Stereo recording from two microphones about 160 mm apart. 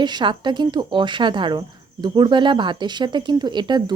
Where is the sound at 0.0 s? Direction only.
30° right (ahead or behind).